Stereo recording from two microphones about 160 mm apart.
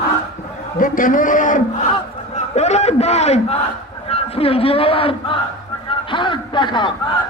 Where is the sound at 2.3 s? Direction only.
45° left (ahead or behind).